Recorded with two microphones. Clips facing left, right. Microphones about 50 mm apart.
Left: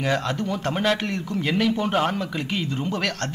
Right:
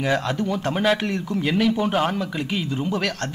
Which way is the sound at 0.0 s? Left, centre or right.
Centre.